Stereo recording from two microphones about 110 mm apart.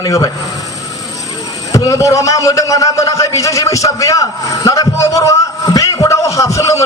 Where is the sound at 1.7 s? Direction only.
30° left (ahead or behind).